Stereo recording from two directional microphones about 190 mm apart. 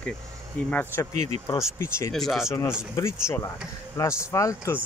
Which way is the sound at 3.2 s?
15° left (ahead or behind).